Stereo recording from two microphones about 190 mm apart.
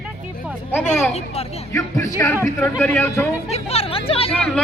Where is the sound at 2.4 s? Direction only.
10° left (ahead or behind).